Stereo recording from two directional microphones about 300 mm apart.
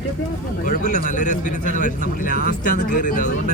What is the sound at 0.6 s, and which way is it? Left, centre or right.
Speech, left.